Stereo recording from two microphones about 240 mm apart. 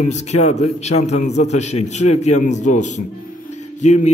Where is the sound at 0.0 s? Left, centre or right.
Left.